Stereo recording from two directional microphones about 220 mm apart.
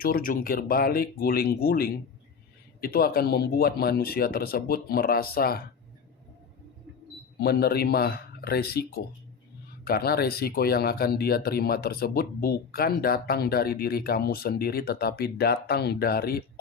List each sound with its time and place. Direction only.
0.0 s speech: 40° left (ahead or behind)
7.3 s speech: 45° left (ahead or behind)